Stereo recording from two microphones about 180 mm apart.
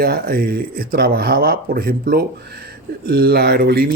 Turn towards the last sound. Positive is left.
turn(degrees=-60)  # may be behind; listen again after turning